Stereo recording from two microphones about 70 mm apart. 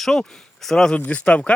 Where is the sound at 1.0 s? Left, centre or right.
Centre.